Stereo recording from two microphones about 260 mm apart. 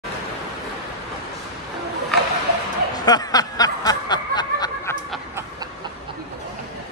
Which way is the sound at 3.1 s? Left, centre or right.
Centre.